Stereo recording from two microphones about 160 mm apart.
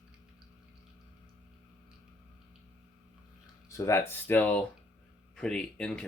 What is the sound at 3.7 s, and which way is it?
Speech, 15° left (ahead or behind).